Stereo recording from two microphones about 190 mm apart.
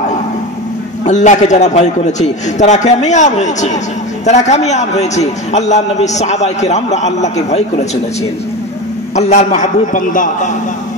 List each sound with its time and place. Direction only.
1.0 s a man's voice: 40° left (ahead or behind)
9.1 s a man's voice: 35° left (ahead or behind)